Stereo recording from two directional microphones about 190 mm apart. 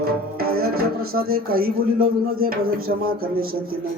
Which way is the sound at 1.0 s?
50° right (ahead or behind).